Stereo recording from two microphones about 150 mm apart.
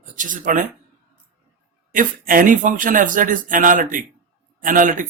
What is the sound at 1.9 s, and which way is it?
A man's voice, 65° right (ahead or behind).